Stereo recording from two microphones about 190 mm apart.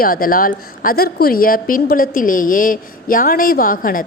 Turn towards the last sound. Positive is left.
turn(degrees=50)  # may be behind; listen again after turning